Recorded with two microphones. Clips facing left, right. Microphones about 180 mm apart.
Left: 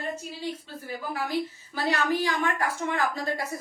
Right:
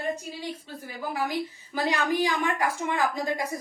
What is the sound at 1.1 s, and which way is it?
A woman's voice, 15° right (ahead or behind).